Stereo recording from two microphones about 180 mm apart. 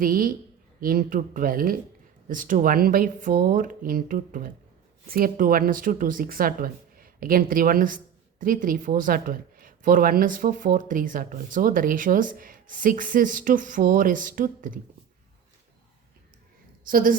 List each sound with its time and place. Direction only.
0.0 s speech: 50° right (ahead or behind)
16.8 s a woman's voice: 50° right (ahead or behind)